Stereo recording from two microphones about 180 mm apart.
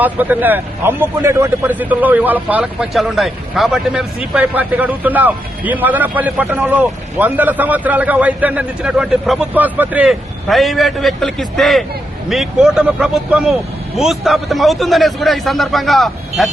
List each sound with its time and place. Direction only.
0.0 s a man's voice: 10° right (ahead or behind)